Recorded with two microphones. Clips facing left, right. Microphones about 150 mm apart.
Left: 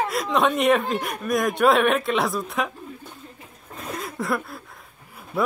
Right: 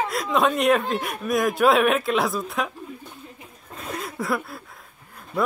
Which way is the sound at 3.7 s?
Centre (ahead or behind).